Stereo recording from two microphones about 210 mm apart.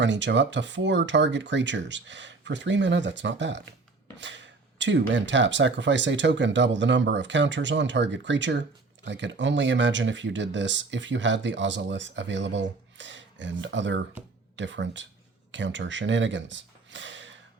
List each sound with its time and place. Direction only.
0.0 s speech: 60° right (ahead or behind)